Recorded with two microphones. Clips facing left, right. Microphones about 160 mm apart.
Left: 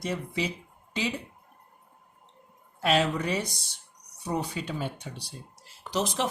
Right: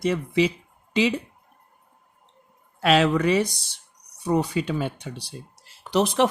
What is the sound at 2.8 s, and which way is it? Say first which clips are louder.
Speech: right 6 dB; 90° right.